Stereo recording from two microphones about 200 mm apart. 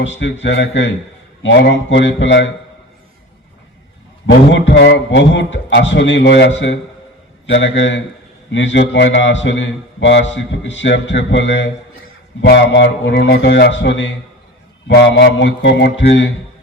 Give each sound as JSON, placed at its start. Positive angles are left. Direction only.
{"t": 0.2, "sound": "a man's voice", "side_deg": 60}
{"t": 4.3, "sound": "a man's voice", "side_deg": 60}